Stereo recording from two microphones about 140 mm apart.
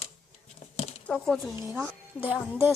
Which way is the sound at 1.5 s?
15° right (ahead or behind).